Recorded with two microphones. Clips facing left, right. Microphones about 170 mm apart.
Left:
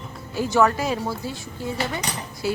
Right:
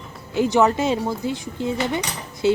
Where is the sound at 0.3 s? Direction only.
20° right (ahead or behind).